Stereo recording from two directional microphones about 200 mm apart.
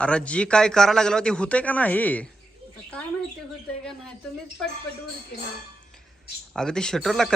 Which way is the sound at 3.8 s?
5° left (ahead or behind).